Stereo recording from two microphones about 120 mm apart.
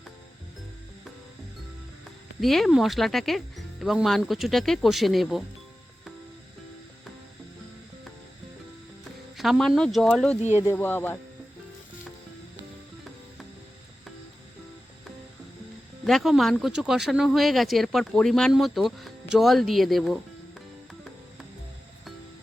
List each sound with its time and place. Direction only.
2.4 s speech: centre (ahead or behind)
9.4 s speech: centre (ahead or behind)
10.7 s speech: 20° left (ahead or behind)
16.0 s speech: centre (ahead or behind)